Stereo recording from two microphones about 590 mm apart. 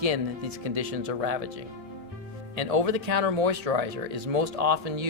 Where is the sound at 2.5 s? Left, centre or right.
Right.